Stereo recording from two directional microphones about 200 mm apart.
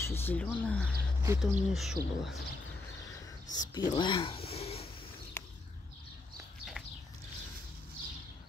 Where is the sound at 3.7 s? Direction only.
20° left (ahead or behind).